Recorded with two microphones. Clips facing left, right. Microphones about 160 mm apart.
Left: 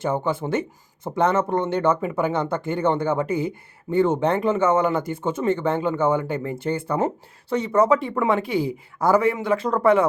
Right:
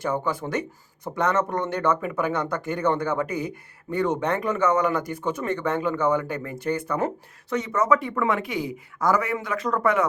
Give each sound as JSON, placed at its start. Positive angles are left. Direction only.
{"t": 0.0, "sound": "speech", "side_deg": 25}